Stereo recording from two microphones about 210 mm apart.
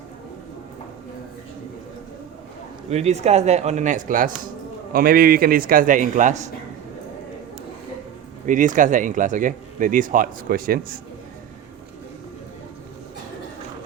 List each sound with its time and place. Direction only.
2.9 s speech: 30° right (ahead or behind)
8.4 s speech: 40° right (ahead or behind)